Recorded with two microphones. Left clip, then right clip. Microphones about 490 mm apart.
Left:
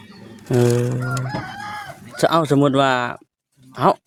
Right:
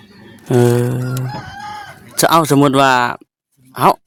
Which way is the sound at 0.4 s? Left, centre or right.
Right.